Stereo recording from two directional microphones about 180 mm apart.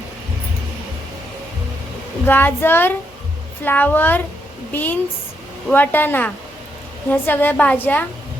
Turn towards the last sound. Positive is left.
turn(degrees=10)  # may be behind; listen again after turning